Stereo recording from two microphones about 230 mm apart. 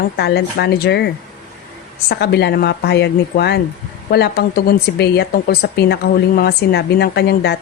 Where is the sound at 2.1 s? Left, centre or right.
Left.